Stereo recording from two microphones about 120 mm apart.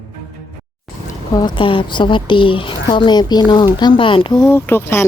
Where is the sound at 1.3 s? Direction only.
40° left (ahead or behind).